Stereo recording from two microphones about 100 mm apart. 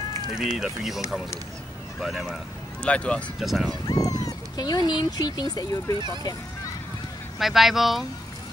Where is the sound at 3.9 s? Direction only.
40° left (ahead or behind).